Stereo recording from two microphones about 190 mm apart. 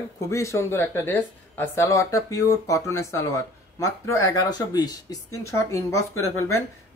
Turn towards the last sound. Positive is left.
turn(degrees=15)  # may be behind; listen again after turning